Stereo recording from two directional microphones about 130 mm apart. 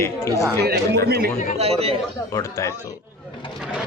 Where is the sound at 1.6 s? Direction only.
50° right (ahead or behind).